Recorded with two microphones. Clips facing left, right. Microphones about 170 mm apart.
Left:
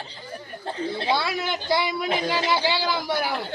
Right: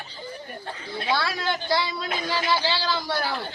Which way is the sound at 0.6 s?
25° left (ahead or behind).